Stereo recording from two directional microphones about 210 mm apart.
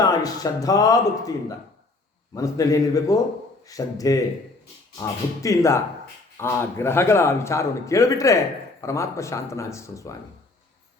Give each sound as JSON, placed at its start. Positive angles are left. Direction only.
{"t": 0.0, "sound": "a man's voice", "side_deg": 20}